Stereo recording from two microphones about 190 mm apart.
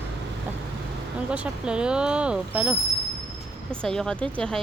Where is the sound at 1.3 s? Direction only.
5° right (ahead or behind).